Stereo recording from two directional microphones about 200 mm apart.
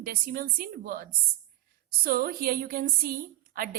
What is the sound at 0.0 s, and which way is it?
A woman's voice, 45° right (ahead or behind).